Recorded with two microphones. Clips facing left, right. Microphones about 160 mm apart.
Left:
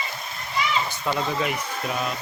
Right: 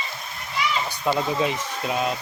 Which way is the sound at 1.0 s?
15° right (ahead or behind).